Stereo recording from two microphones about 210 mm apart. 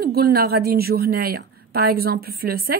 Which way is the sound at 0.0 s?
45° right (ahead or behind).